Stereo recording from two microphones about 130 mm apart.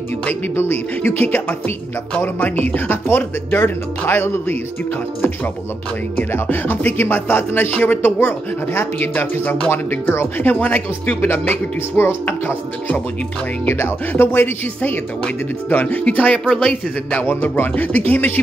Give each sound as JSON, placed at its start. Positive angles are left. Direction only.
{"t": 0.2, "sound": "a man's voice", "side_deg": 15}
{"t": 2.1, "sound": "a man's voice", "side_deg": 15}
{"t": 6.1, "sound": "a man's voice", "side_deg": 15}